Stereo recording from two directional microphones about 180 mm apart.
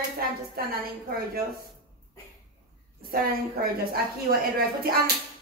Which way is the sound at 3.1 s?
55° right (ahead or behind).